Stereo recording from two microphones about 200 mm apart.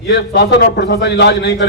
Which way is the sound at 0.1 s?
55° left (ahead or behind).